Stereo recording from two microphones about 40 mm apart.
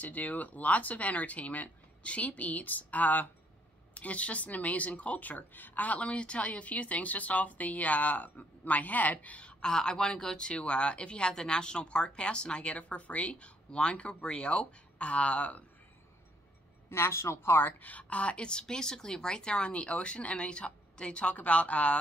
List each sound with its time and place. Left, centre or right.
0.0 s speech: left
9.7 s speech: centre; by 15.6 s left
16.9 s speech: left
17.8 s speech: left